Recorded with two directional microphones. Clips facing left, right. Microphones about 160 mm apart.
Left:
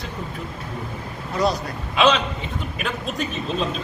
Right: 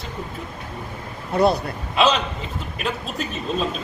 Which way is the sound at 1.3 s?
60° right (ahead or behind).